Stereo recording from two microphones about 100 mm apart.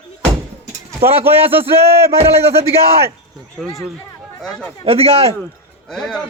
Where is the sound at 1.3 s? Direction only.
20° right (ahead or behind).